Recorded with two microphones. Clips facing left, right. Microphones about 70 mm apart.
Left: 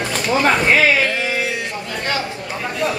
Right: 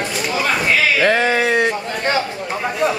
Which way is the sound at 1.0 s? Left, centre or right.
Right.